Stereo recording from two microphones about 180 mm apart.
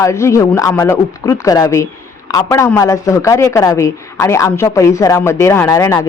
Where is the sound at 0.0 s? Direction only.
15° left (ahead or behind).